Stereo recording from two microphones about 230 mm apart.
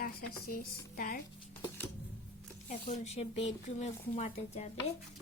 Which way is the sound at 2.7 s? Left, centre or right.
Left.